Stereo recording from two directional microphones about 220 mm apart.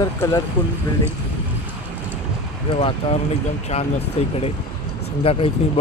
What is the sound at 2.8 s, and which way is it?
Speech, 30° left (ahead or behind).